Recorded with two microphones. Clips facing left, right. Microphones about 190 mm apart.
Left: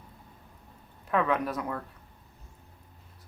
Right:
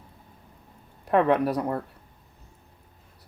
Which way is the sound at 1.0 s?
35° right (ahead or behind).